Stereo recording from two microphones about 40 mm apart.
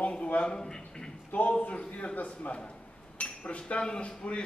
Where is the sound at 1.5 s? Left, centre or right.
Left.